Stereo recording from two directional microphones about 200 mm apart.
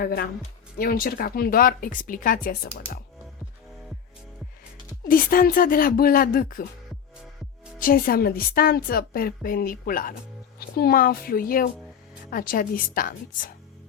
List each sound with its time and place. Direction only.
0.0 s speech: 55° left (ahead or behind)
5.0 s speech: 45° left (ahead or behind)
7.8 s speech: 45° left (ahead or behind)